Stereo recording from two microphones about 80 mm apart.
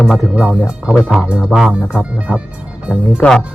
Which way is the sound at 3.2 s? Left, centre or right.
Centre.